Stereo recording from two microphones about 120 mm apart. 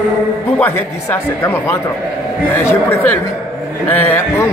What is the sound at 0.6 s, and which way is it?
A man's voice, 15° left (ahead or behind).